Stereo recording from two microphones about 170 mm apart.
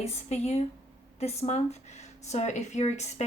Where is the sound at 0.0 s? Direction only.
40° left (ahead or behind).